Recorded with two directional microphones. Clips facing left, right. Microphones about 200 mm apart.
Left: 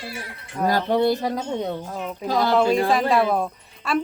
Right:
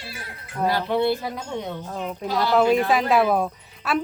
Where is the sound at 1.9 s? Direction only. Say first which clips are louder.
Left 2 dB; 5° left (ahead or behind).